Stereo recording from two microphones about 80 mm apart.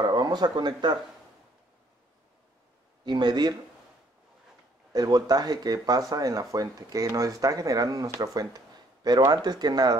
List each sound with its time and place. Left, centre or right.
0.0 s speech: right
3.1 s speech: right
4.9 s speech: right